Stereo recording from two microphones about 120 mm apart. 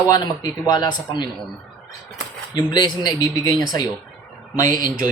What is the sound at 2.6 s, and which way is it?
Speech, 40° left (ahead or behind).